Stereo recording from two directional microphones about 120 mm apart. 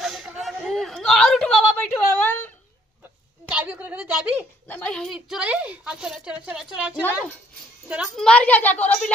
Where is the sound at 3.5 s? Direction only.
10° right (ahead or behind).